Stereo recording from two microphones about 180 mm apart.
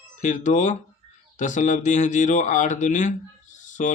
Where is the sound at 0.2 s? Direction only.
45° left (ahead or behind).